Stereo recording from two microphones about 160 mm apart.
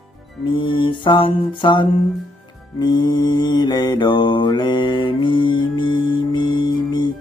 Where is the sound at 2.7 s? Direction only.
25° left (ahead or behind).